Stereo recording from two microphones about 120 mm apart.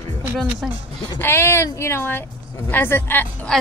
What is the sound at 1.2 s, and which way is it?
A woman's voice, 20° left (ahead or behind).